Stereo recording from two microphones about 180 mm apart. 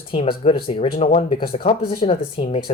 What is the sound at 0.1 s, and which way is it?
Speech, 30° left (ahead or behind).